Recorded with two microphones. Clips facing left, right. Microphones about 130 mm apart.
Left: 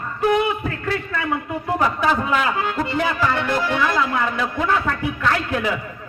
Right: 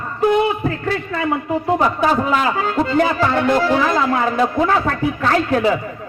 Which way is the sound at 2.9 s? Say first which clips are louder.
Right 5 dB; 45° right (ahead or behind).